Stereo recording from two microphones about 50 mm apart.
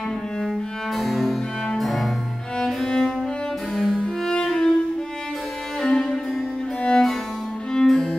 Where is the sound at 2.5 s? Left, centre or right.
Centre.